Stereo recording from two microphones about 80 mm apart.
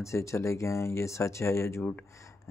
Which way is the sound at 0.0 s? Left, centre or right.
Left.